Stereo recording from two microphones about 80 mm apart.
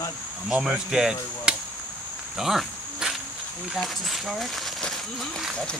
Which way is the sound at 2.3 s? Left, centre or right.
Centre.